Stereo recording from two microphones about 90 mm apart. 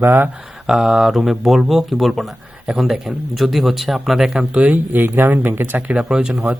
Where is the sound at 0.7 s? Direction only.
5° right (ahead or behind); by 5.8 s 25° right (ahead or behind).